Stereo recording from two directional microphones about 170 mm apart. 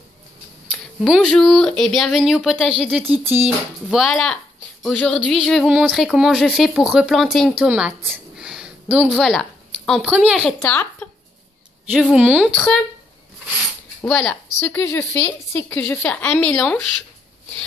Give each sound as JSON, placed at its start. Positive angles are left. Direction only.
{"t": 1.0, "sound": "speech", "side_deg": 0}
{"t": 3.0, "sound": "a sound", "side_deg": -15}
{"t": 3.9, "sound": "a woman's voice", "side_deg": 0}
{"t": 11.9, "sound": "speech", "side_deg": -5}
{"t": 14.0, "sound": "a woman's voice", "side_deg": 5}